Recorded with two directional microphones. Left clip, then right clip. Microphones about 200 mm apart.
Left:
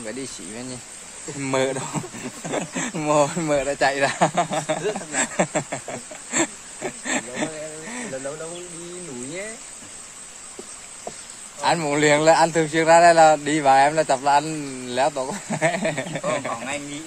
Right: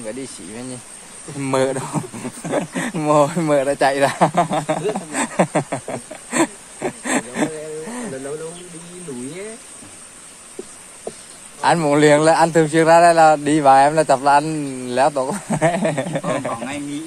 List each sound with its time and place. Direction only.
0.0 s speech: 15° left (ahead or behind)
1.4 s speech: 5° right (ahead or behind); by 4.8 s 20° right (ahead or behind)
5.1 s a sound: 25° right (ahead or behind)
11.6 s speech: 25° right (ahead or behind)